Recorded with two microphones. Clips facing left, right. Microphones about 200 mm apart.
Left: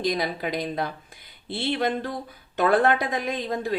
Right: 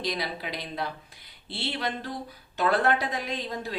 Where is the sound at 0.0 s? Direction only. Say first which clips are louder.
Left 6 dB; 50° left (ahead or behind).